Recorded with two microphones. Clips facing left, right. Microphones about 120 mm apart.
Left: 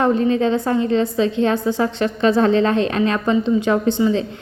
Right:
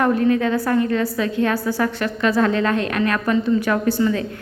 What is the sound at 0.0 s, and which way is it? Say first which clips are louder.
A woman's voice: left 1 dB; 25° left (ahead or behind).